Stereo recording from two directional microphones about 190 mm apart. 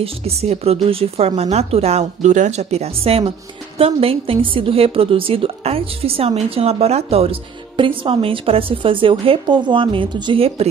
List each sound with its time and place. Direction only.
0.0 s speech: 35° right (ahead or behind)